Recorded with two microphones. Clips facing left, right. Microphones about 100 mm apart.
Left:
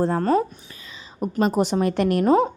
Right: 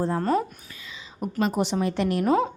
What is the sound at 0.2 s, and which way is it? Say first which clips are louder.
A woman's voice: left 4 dB; 40° left (ahead or behind).